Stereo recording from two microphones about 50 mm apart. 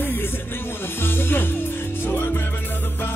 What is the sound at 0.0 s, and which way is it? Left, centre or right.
Music, left.